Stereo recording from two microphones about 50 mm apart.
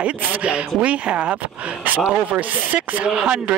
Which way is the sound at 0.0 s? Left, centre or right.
Right.